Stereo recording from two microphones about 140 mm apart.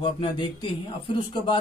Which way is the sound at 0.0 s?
35° left (ahead or behind).